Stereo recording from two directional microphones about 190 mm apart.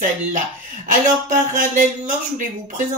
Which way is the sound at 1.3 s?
45° right (ahead or behind).